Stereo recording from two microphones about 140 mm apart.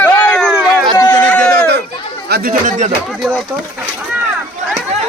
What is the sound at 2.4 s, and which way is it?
Speech, 65° right (ahead or behind).